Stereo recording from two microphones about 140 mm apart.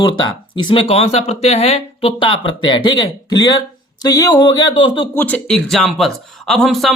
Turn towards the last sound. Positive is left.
turn(degrees=0)  # may be behind; listen again after turning